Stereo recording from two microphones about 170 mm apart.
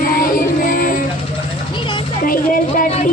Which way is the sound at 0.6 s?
55° left (ahead or behind).